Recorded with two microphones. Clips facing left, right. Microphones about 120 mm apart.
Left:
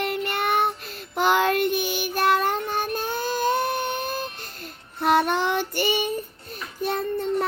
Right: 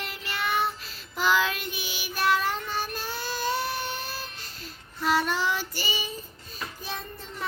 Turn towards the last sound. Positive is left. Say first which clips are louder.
# left 12 dB
turn(degrees=60)  # may be behind; listen again after turning